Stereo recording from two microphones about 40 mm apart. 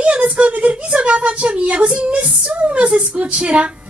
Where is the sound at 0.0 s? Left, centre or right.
Right.